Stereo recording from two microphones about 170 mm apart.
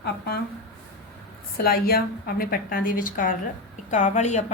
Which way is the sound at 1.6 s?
60° left (ahead or behind).